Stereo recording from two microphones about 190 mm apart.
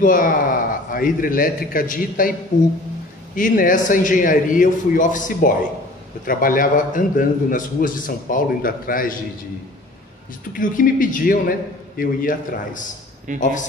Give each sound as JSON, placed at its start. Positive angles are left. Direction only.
{"t": 0.0, "sound": "a man's voice", "side_deg": 45}
{"t": 3.3, "sound": "a man's voice", "side_deg": 45}
{"t": 10.5, "sound": "a man's voice", "side_deg": 45}